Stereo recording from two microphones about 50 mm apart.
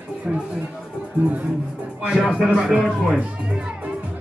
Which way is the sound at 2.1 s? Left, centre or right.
Centre.